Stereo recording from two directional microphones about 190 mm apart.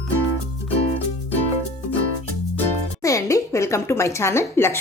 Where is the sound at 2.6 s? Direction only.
15° left (ahead or behind).